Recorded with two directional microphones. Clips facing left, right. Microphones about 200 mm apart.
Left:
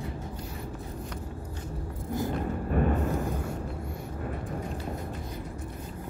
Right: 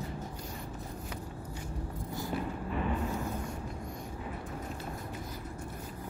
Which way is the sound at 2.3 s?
50° left (ahead or behind).